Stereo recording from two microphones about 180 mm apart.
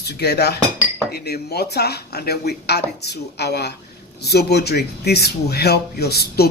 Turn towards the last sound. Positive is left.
turn(degrees=60)  # may be behind; listen again after turning